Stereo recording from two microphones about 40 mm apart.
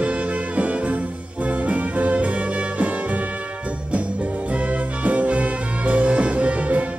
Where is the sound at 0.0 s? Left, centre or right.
Right.